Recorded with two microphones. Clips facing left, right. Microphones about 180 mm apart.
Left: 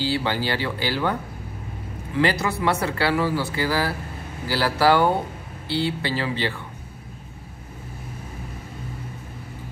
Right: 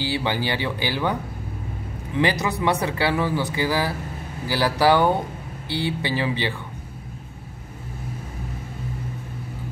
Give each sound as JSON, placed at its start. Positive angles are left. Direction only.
{"t": 0.0, "sound": "speech", "side_deg": -15}
{"t": 2.1, "sound": "speech", "side_deg": -20}